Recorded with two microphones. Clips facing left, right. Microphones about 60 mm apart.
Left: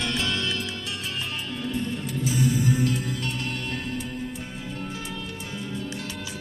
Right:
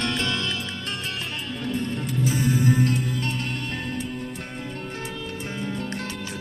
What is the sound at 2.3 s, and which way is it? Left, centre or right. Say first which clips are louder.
Music: right 1 dB; right.